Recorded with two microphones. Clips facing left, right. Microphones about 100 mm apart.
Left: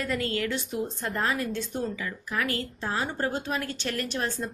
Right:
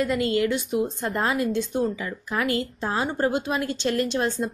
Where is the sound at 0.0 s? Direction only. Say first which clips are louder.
Right 6 dB; 20° right (ahead or behind).